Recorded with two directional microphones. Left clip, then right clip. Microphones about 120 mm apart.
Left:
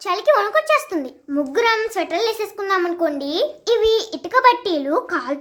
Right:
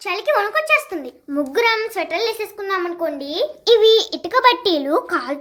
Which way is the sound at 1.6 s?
20° left (ahead or behind).